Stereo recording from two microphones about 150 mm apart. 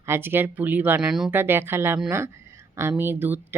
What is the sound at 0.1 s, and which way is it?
A woman's voice, 15° right (ahead or behind).